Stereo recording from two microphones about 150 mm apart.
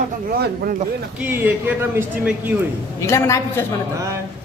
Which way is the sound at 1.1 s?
10° right (ahead or behind).